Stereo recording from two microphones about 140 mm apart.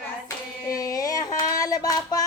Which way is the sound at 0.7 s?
25° left (ahead or behind).